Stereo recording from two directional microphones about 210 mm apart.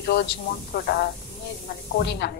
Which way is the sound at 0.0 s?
50° left (ahead or behind).